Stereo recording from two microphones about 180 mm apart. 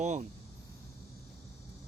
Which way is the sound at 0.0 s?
40° right (ahead or behind).